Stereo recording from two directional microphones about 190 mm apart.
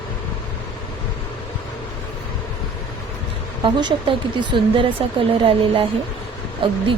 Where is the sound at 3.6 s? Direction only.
25° right (ahead or behind).